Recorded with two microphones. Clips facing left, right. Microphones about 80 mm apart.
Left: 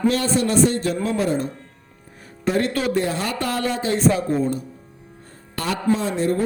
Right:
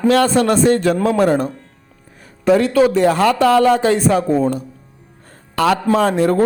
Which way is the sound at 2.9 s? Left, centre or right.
Right.